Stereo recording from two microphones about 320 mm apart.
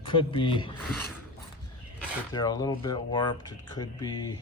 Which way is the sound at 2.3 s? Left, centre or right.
Centre.